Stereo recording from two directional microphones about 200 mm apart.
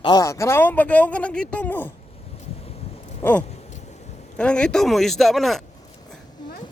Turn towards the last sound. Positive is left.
turn(degrees=0)  # may be behind; listen again after turning